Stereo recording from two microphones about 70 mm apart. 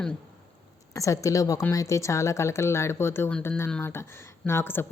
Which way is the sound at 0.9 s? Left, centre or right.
Left.